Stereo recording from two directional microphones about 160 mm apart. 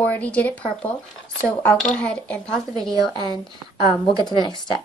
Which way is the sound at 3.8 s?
25° right (ahead or behind).